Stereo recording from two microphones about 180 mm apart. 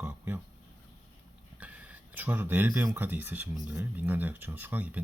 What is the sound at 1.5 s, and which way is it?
Speech, 10° right (ahead or behind).